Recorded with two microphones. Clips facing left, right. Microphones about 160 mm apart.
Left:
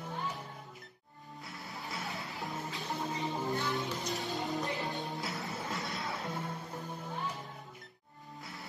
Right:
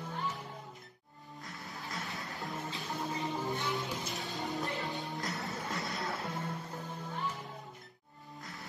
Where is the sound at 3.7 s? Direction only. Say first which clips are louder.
Left 2 dB; centre (ahead or behind).